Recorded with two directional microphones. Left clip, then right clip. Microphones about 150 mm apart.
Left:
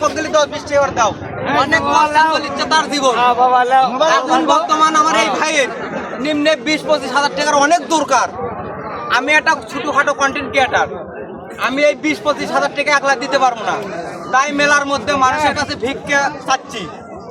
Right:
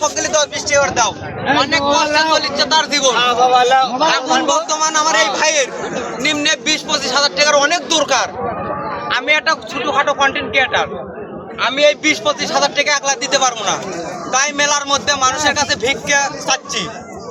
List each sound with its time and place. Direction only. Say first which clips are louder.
0.0 s a man's voice: left 1 dB; 5° left (ahead or behind)